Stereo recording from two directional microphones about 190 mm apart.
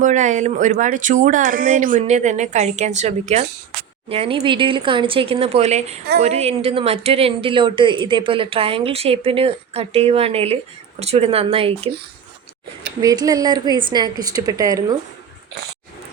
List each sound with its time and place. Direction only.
0.0 s speech: 40° right (ahead or behind)
13.0 s speech: 20° right (ahead or behind)